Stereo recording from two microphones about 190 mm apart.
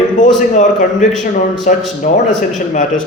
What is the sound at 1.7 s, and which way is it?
Speech, 45° left (ahead or behind).